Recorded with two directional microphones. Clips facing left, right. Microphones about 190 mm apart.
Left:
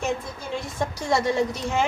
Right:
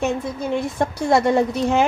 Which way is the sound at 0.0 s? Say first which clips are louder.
Right 6 dB; 60° right (ahead or behind).